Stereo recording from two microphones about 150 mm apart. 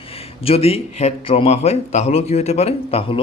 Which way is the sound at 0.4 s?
40° left (ahead or behind).